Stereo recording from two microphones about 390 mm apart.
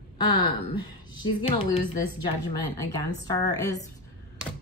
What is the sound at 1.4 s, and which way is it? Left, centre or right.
A woman's voice, centre.